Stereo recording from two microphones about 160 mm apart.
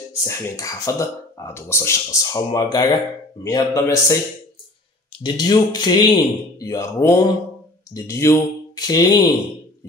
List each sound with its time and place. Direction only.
0.2 s speech: 20° left (ahead or behind)
5.2 s speech: 25° left (ahead or behind)